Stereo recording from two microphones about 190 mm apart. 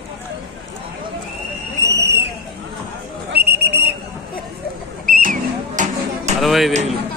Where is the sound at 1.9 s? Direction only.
60° right (ahead or behind).